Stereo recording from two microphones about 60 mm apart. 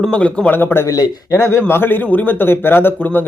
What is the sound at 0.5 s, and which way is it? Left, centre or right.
Speech, left.